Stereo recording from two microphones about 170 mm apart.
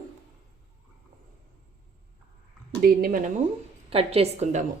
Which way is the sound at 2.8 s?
55° right (ahead or behind).